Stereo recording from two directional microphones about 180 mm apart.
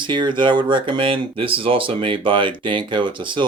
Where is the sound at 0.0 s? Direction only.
25° right (ahead or behind).